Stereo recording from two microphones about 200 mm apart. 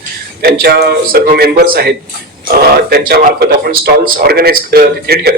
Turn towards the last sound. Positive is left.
turn(degrees=-50)  # may be behind; listen again after turning